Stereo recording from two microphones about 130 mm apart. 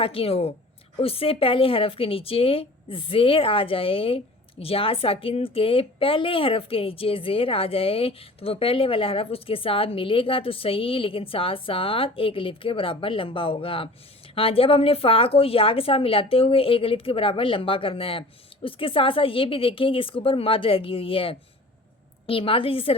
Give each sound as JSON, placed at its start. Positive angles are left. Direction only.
{"t": 0.0, "sound": "a woman's voice", "side_deg": 45}